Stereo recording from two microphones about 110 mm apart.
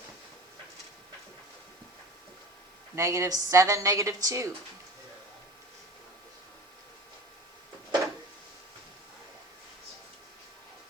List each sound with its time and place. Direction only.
2.9 s a woman's voice: 25° right (ahead or behind)